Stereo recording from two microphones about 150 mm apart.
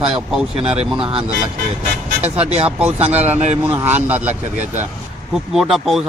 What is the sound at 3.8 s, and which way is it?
Speech, 10° right (ahead or behind).